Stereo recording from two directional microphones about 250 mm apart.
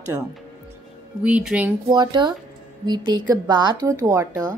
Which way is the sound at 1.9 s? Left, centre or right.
Centre.